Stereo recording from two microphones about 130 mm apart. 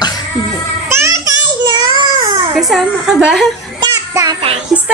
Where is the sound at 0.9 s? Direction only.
20° right (ahead or behind).